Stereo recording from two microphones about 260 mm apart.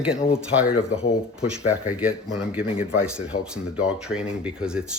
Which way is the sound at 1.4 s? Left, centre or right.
Centre.